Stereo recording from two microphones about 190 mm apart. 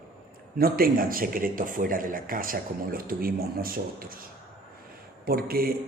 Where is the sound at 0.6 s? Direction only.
50° right (ahead or behind).